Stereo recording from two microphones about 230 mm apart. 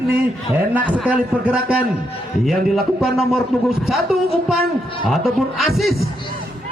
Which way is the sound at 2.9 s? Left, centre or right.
Centre.